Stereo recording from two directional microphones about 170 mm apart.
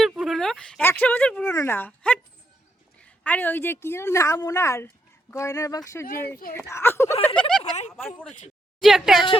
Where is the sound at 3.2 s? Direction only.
10° left (ahead or behind).